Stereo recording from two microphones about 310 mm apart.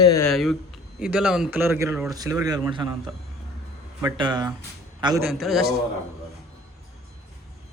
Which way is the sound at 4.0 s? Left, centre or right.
Centre.